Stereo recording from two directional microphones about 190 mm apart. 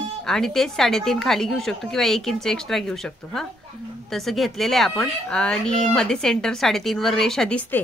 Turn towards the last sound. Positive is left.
turn(degrees=5)  # may be behind; listen again after turning